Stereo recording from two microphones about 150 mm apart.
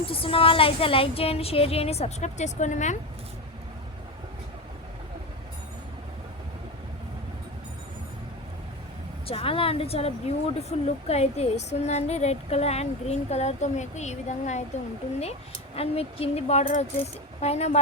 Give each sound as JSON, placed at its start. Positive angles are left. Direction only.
{"t": 0.0, "sound": "a woman's voice", "side_deg": 40}
{"t": 9.2, "sound": "speech", "side_deg": 40}